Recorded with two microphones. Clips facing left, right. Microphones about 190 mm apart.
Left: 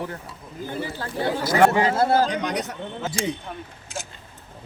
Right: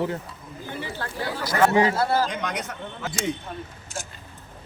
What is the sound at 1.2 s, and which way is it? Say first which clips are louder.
Speech: left 4 dB; 25° left (ahead or behind).